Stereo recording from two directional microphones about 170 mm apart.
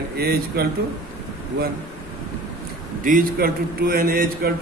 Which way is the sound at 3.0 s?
55° right (ahead or behind).